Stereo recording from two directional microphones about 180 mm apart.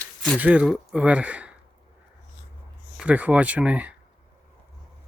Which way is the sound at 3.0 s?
5° right (ahead or behind).